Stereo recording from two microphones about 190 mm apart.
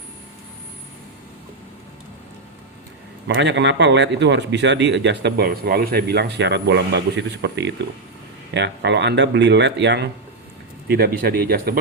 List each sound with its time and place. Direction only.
3.2 s a man's voice: 65° right (ahead or behind)
10.8 s speech: 55° right (ahead or behind)